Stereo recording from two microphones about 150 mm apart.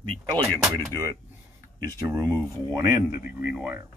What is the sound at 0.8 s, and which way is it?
Speech, 20° right (ahead or behind).